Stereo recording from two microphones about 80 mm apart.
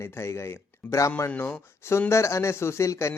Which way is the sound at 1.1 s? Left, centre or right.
Left.